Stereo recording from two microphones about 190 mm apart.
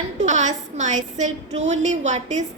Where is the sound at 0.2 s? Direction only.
40° right (ahead or behind).